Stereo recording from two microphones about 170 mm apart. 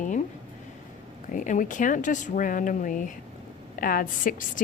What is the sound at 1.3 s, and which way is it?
A woman's voice, 50° left (ahead or behind).